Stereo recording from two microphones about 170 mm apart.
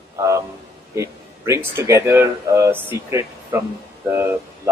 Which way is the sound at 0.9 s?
15° right (ahead or behind).